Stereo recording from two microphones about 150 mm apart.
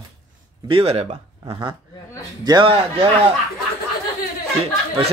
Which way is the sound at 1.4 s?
30° right (ahead or behind).